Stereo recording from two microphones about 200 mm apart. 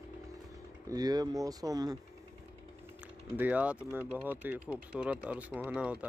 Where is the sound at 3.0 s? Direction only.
10° right (ahead or behind).